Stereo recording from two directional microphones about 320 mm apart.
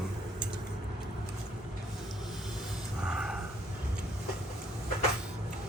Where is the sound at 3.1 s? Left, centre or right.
Centre.